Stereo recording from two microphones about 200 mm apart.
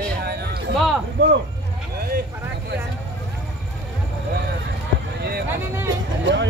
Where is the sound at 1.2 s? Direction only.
65° right (ahead or behind).